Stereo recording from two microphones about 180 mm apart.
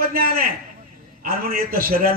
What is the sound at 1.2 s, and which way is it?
Speech, 55° right (ahead or behind).